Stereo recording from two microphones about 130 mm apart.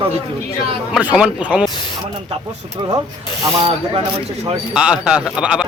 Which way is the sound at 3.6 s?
45° right (ahead or behind).